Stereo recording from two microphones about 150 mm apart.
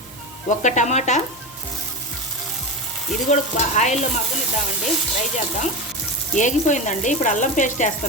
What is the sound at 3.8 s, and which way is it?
Speech, 50° left (ahead or behind).